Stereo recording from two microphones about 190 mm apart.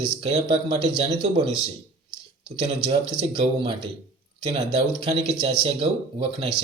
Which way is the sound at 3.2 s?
30° right (ahead or behind).